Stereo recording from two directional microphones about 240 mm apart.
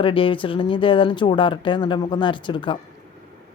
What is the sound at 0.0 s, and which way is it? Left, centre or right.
Speech, left.